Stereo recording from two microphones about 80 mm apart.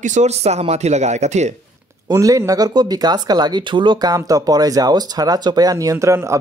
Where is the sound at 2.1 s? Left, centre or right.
Right.